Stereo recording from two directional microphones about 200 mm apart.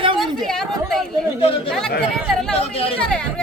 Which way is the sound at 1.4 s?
30° left (ahead or behind).